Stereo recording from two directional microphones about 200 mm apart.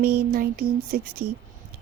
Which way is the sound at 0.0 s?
50° right (ahead or behind).